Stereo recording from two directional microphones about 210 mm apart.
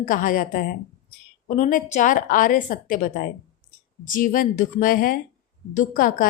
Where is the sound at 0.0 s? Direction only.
40° left (ahead or behind).